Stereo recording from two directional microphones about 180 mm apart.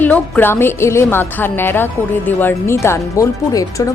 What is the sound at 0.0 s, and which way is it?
A woman's voice, 10° left (ahead or behind).